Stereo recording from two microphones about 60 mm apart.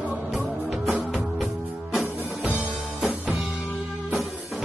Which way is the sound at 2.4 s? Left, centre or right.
Right.